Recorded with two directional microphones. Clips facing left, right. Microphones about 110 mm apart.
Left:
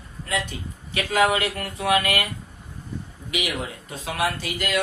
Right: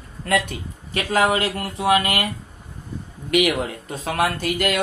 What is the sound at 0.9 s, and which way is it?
Speech, 40° right (ahead or behind).